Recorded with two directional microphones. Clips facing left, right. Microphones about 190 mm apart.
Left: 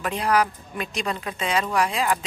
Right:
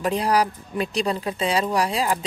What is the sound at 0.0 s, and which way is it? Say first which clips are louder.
A woman's voice: right 2 dB; 35° right (ahead or behind).